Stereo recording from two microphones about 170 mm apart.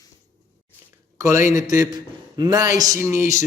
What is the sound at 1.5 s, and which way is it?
A man's voice, 20° right (ahead or behind).